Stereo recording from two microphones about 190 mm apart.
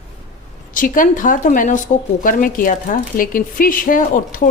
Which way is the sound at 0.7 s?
45° left (ahead or behind).